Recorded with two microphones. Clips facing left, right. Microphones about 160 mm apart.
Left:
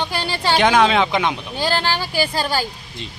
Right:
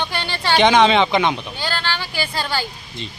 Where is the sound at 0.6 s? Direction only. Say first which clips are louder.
Right 2 dB; 5° left (ahead or behind).